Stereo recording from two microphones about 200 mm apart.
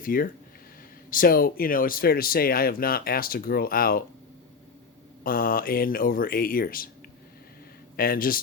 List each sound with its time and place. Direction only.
0.0 s speech: 45° left (ahead or behind)
5.2 s speech: 45° left (ahead or behind)
7.9 s speech: 45° left (ahead or behind)